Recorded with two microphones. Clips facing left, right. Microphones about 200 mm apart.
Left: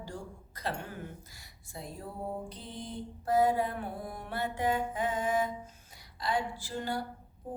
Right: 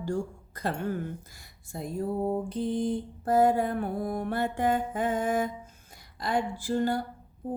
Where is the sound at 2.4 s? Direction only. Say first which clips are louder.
Right 14 dB; 50° right (ahead or behind).